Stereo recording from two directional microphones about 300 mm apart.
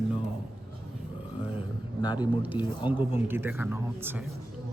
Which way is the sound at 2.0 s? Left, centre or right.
Centre.